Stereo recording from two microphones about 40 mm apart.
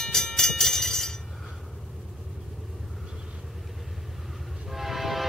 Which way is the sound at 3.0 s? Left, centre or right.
Centre.